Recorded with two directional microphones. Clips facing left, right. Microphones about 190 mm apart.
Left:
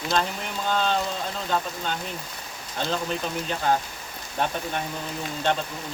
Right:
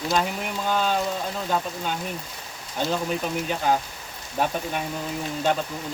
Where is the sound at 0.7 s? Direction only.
10° right (ahead or behind).